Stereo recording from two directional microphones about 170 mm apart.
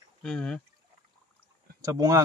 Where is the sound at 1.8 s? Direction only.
20° right (ahead or behind).